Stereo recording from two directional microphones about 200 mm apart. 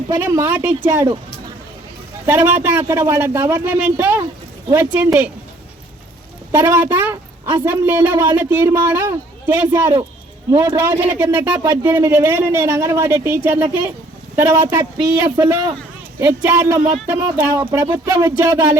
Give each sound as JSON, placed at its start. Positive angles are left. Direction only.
{"t": 0.1, "sound": "a woman's voice", "side_deg": -15}
{"t": 2.2, "sound": "a woman's voice", "side_deg": -10}
{"t": 6.5, "sound": "a woman's voice", "side_deg": -10}